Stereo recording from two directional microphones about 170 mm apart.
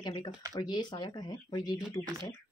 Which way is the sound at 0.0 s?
25° left (ahead or behind).